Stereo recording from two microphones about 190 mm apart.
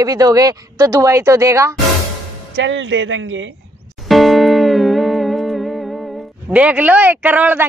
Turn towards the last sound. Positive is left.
turn(degrees=-10)  # may be behind; listen again after turning